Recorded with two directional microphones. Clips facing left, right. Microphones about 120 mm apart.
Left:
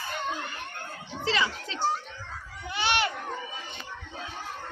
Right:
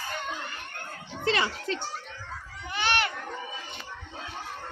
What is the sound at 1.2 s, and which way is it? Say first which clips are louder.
Speech: right 1 dB; 55° right (ahead or behind).